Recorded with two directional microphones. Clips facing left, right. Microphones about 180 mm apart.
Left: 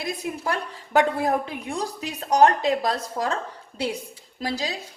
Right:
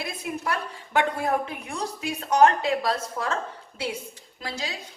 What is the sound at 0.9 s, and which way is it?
A woman's voice, 35° left (ahead or behind).